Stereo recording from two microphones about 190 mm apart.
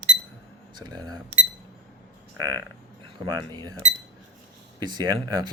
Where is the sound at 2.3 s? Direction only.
20° right (ahead or behind).